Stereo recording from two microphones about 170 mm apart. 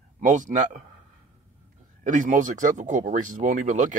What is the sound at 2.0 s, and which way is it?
Speech, 45° right (ahead or behind).